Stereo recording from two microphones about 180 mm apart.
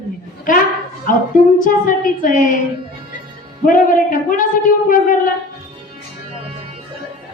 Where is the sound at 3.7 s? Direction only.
50° left (ahead or behind).